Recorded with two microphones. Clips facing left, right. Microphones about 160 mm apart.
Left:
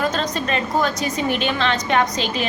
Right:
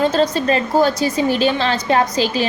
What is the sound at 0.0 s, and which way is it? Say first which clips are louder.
A woman's voice: right 6 dB; 30° right (ahead or behind).